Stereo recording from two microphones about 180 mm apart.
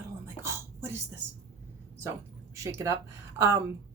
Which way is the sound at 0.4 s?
15° right (ahead or behind).